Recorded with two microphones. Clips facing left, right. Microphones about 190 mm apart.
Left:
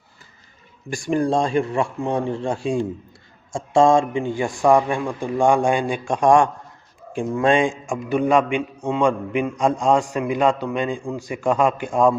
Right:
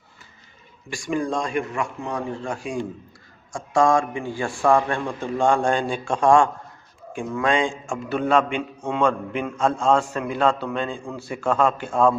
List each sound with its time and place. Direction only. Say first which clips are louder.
1.0 s a man's voice: left 5 dB; 35° left (ahead or behind); by 12.1 s 15° left (ahead or behind)